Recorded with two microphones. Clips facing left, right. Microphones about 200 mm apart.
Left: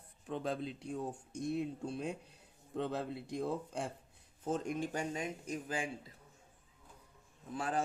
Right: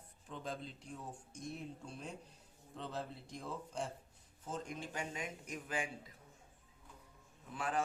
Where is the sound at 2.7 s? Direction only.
60° left (ahead or behind).